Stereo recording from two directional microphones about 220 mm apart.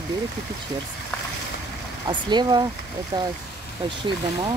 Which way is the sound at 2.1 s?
20° right (ahead or behind).